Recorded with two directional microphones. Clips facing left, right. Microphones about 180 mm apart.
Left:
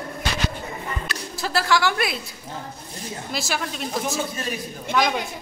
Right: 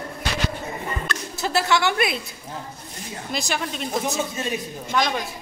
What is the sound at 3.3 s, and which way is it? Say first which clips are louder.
Speech: right 1 dB; 5° left (ahead or behind).